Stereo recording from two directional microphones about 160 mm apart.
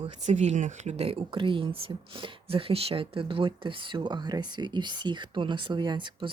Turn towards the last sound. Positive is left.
turn(degrees=-30)  # may be behind; listen again after turning